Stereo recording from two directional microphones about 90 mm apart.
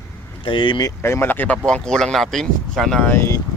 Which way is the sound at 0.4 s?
65° left (ahead or behind).